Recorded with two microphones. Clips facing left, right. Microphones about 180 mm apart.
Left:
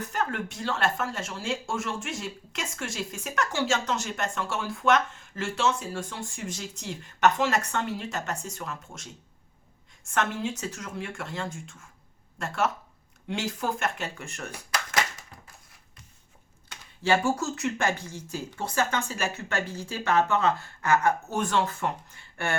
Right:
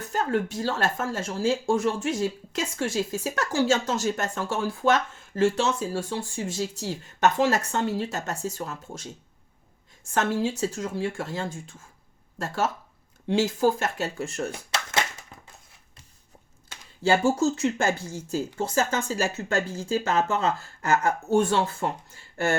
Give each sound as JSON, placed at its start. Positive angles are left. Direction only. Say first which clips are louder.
{"t": 0.0, "sound": "speech", "louder": "right 5 dB", "side_deg": -30}
{"t": 10.1, "sound": "speech", "louder": "right 4 dB", "side_deg": -35}
{"t": 13.2, "sound": "speech", "louder": "right 8 dB", "side_deg": -30}
{"t": 17.1, "sound": "speech", "louder": "right 4 dB", "side_deg": -25}
{"t": 17.9, "sound": "speech", "louder": "right 3 dB", "side_deg": -5}
{"t": 18.5, "sound": "speech", "louder": "right 1 dB", "side_deg": -30}